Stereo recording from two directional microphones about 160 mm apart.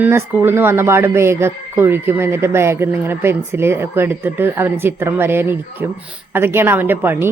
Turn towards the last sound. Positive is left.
turn(degrees=-15)  # may be behind; listen again after turning